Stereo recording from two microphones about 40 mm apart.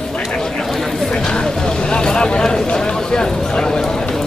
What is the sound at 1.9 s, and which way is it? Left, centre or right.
Vehicle, left.